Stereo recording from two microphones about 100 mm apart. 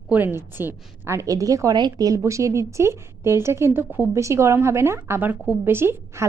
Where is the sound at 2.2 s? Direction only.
30° right (ahead or behind).